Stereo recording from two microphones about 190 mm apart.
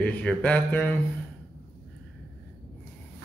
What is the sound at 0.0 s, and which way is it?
Speech, 5° left (ahead or behind).